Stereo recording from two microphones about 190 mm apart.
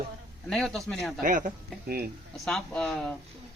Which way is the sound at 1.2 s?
45° right (ahead or behind).